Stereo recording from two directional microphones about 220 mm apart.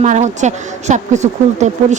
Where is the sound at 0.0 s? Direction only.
30° right (ahead or behind).